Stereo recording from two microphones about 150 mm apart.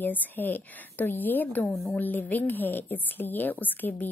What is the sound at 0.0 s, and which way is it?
A woman's voice, 10° left (ahead or behind).